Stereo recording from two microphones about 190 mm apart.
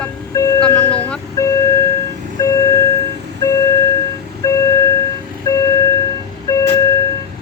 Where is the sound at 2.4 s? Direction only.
20° left (ahead or behind).